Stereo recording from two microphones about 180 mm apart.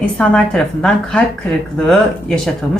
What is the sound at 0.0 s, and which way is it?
Speech, 5° left (ahead or behind).